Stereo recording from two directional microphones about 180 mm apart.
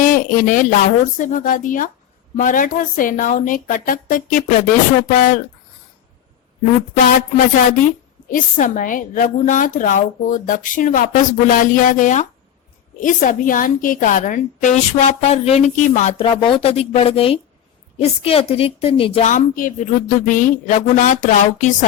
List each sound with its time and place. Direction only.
0.0 s a woman's voice: 45° left (ahead or behind)
7.0 s a woman's voice: 50° left (ahead or behind); by 19.3 s 30° left (ahead or behind)
19.3 s a woman's voice: 45° left (ahead or behind)